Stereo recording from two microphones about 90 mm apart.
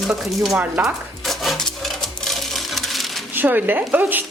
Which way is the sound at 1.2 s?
Centre (ahead or behind).